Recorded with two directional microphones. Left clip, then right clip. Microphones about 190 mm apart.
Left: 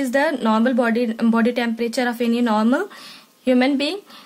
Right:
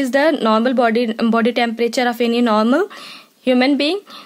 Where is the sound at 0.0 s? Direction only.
45° right (ahead or behind).